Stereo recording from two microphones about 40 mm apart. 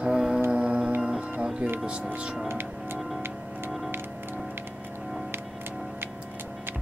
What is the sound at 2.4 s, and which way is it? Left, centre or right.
Speech, right.